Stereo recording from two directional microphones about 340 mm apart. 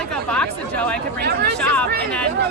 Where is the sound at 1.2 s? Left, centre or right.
Right.